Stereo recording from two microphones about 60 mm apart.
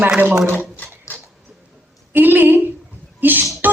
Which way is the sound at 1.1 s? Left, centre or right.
Left.